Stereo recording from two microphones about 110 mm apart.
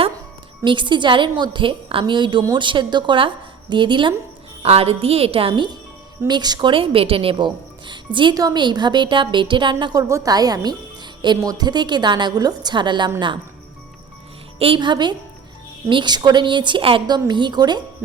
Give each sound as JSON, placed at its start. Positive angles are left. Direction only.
{"t": 0.6, "sound": "a woman's voice", "side_deg": -45}
{"t": 4.6, "sound": "a woman's voice", "side_deg": -65}
{"t": 6.2, "sound": "a woman's voice", "side_deg": -40}
{"t": 14.6, "sound": "a woman's voice", "side_deg": -50}